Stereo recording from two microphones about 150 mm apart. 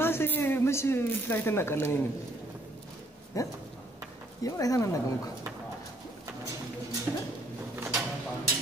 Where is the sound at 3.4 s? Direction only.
20° left (ahead or behind).